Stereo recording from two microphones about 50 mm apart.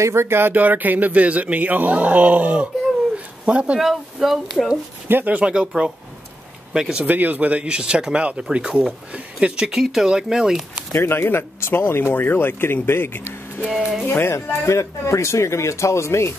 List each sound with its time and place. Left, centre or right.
0.0 s speech: right
0.6 s speech: right
3.4 s speech: right
3.8 s speech: centre
5.2 s speech: right
6.7 s speech: centre
7.0 s speech: right
7.6 s speech: centre
9.7 s speech: centre
10.9 s speech: left